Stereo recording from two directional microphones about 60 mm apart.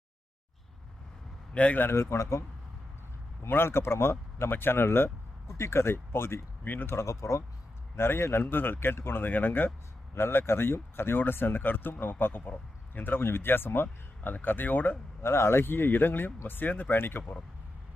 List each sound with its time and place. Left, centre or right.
1.5 s a man's voice: left
1.8 s a man's voice: left
3.4 s speech: left
6.9 s speech: left
7.9 s speech: left
15.2 s speech: left